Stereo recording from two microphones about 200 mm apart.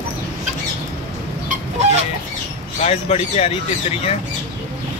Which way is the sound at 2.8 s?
30° left (ahead or behind).